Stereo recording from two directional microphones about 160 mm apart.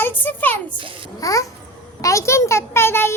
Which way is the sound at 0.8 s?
30° right (ahead or behind).